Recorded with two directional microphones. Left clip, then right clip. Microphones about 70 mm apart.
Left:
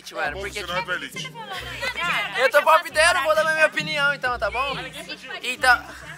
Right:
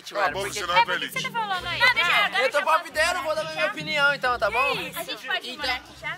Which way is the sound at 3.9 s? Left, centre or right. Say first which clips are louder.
Even; centre.